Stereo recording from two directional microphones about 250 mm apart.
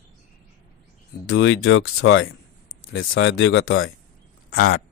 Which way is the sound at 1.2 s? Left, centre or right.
Left.